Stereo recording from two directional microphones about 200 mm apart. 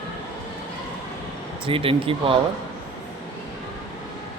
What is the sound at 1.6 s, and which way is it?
Speech, 25° right (ahead or behind).